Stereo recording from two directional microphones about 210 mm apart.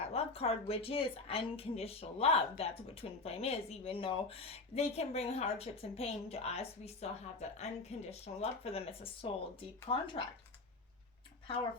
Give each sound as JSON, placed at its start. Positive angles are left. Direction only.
{"t": 0.1, "sound": "a woman's voice", "side_deg": 30}